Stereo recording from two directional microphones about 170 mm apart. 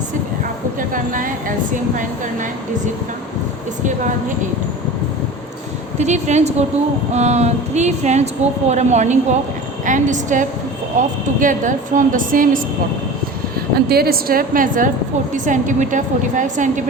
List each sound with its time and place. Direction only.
0.8 s a woman's voice: 55° right (ahead or behind)
6.0 s a woman's voice: 45° right (ahead or behind)
13.7 s a woman's voice: 65° right (ahead or behind); by 16.8 s 45° right (ahead or behind)